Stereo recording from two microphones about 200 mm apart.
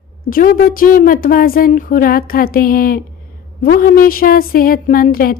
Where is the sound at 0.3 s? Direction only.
45° left (ahead or behind).